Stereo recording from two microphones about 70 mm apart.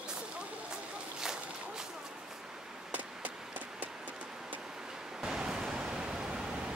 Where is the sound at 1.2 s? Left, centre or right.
Centre.